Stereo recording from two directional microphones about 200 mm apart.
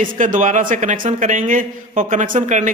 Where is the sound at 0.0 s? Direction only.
40° right (ahead or behind).